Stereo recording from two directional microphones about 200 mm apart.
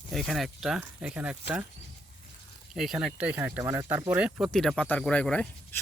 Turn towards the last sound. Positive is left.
turn(degrees=5)  # may be behind; listen again after turning